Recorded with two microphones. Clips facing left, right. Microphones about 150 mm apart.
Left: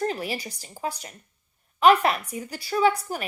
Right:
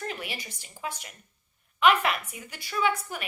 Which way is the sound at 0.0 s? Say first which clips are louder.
Left 8 dB; 40° left (ahead or behind).